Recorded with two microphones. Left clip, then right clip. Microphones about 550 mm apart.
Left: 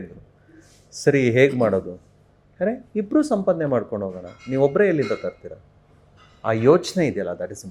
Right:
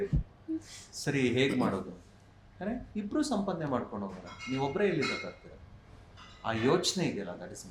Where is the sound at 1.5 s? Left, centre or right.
Centre.